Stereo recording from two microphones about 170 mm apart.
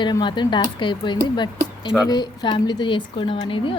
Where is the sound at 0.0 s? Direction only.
25° left (ahead or behind).